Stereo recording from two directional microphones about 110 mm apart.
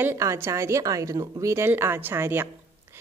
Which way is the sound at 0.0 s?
25° right (ahead or behind).